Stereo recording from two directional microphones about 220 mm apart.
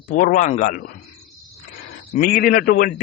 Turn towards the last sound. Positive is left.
turn(degrees=40)  # may be behind; listen again after turning